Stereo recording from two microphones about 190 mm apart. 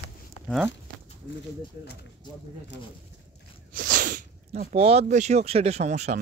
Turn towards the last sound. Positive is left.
turn(degrees=-40)  # may be behind; listen again after turning